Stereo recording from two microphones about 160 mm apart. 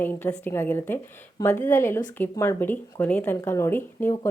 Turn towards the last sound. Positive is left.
turn(degrees=15)  # may be behind; listen again after turning